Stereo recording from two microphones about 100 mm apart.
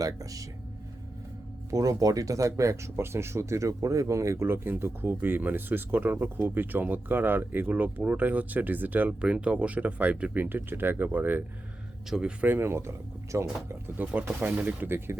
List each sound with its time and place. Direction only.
0.0 s speech: 35° right (ahead or behind)
1.7 s speech: 35° right (ahead or behind); by 12.5 s 10° right (ahead or behind)
12.5 s speech: 25° right (ahead or behind)
14.0 s speech: 15° right (ahead or behind)